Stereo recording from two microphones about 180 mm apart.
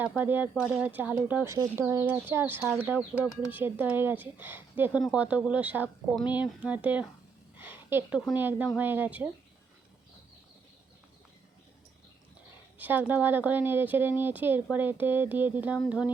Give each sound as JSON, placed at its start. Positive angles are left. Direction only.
{"t": 0.2, "sound": "speech", "side_deg": -10}
{"t": 7.5, "sound": "a sound", "side_deg": -10}
{"t": 8.2, "sound": "speech", "side_deg": -10}
{"t": 12.8, "sound": "speech", "side_deg": -10}